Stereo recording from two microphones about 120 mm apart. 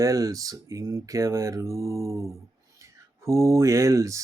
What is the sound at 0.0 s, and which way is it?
Speech, 30° right (ahead or behind).